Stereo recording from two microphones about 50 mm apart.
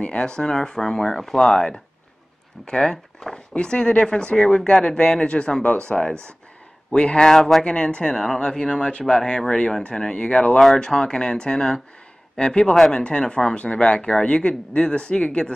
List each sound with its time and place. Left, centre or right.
0.0 s speech: centre
7.2 s speech: centre
7.6 s speech: left